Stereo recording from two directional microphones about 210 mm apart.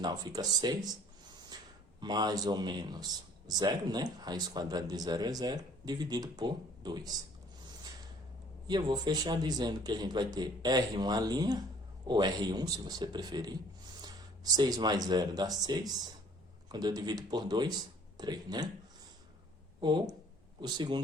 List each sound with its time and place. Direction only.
0.0 s a man's voice: 20° right (ahead or behind)
1.5 s a sound: 20° right (ahead or behind)
2.0 s a man's voice: 20° right (ahead or behind)
8.6 s a man's voice: 20° right (ahead or behind)
19.8 s a man's voice: 20° right (ahead or behind)